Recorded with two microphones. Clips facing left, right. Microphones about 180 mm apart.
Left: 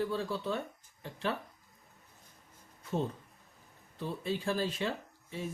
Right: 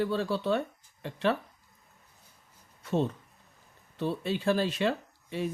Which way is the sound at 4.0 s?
75° right (ahead or behind).